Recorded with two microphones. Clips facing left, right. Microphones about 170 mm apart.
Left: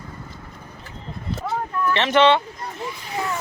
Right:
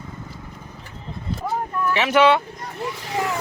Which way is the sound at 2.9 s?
80° right.